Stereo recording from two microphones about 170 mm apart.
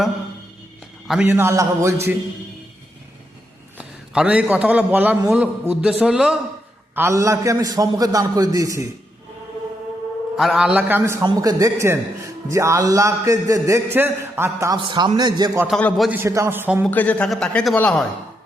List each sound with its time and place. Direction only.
1.0 s a man's voice: centre (ahead or behind)
1.3 s a man's voice: 15° right (ahead or behind)
3.8 s a man's voice: 5° right (ahead or behind)
6.9 s a man's voice: 15° right (ahead or behind)
10.3 s a man's voice: centre (ahead or behind)
14.8 s a man's voice: 25° right (ahead or behind)
15.6 s speech: centre (ahead or behind)
16.1 s a man's voice: 15° right (ahead or behind)
16.8 s speech: 10° left (ahead or behind)